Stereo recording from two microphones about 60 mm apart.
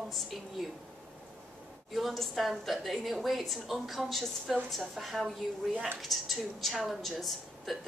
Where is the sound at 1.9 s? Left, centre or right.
Centre.